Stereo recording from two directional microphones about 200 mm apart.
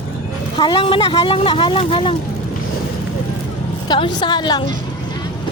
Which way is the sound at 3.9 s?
20° left (ahead or behind).